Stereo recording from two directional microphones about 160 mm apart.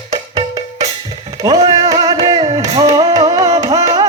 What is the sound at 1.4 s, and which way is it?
Music, 25° right (ahead or behind).